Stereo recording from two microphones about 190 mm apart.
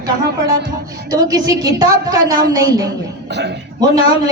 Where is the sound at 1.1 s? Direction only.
20° right (ahead or behind).